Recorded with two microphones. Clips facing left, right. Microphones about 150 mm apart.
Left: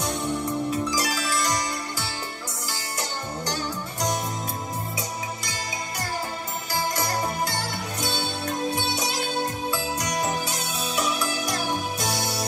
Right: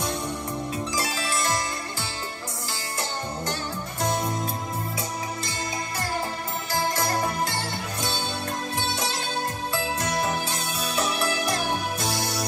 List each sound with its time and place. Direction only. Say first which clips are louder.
0.9 s music: left 2 dB; 25° right (ahead or behind)
10.0 s music: even; 15° left (ahead or behind)
12.1 s music: left 1 dB; 25° left (ahead or behind)